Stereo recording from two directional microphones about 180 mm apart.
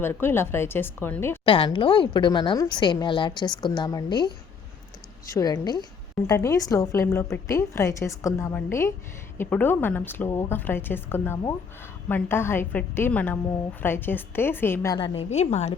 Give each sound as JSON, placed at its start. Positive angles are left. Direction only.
{"t": 0.0, "sound": "a woman's voice", "side_deg": 15}
{"t": 1.5, "sound": "speech", "side_deg": 30}
{"t": 5.3, "sound": "a woman's voice", "side_deg": 20}
{"t": 14.9, "sound": "a woman's voice", "side_deg": 30}